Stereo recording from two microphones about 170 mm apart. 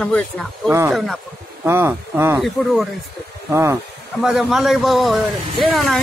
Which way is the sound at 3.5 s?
15° right (ahead or behind).